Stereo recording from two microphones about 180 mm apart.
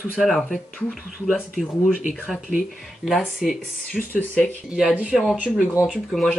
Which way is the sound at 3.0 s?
Centre (ahead or behind).